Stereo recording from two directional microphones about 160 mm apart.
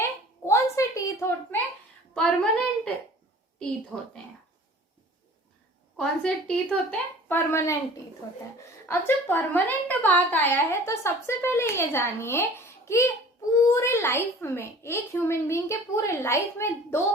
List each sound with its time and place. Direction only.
0.0 s a sound: 15° left (ahead or behind)
2.1 s a woman's voice: 5° left (ahead or behind)
6.0 s a woman's voice: 5° left (ahead or behind)
8.9 s a woman's voice: 15° left (ahead or behind)